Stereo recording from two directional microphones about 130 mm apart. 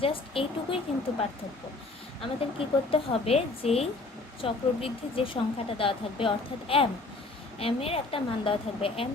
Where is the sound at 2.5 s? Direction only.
45° left (ahead or behind).